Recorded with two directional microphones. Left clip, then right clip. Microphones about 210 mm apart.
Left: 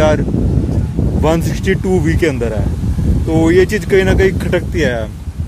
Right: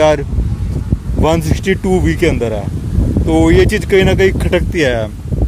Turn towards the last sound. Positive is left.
turn(degrees=-25)  # may be behind; listen again after turning